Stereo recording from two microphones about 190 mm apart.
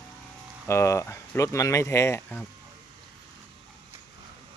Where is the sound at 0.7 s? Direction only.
15° left (ahead or behind).